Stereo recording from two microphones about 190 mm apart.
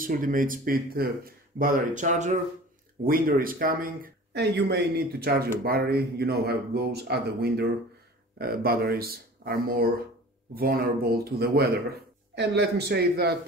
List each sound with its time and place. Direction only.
0.0 s speech: 45° right (ahead or behind)